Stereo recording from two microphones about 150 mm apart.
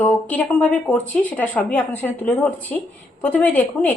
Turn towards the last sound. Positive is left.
turn(degrees=10)  # may be behind; listen again after turning